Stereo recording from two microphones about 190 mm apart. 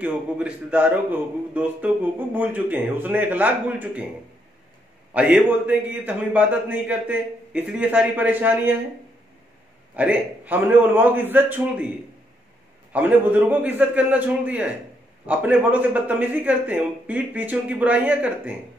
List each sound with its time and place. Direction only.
0.0 s speech: 5° right (ahead or behind)
5.1 s speech: 5° right (ahead or behind)
9.9 s speech: 10° right (ahead or behind)
12.9 s speech: 10° right (ahead or behind)